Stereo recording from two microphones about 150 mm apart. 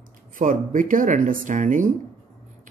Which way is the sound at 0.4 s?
60° right (ahead or behind).